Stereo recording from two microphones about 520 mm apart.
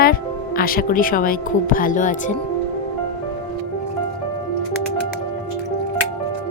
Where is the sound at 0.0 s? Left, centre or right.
Centre.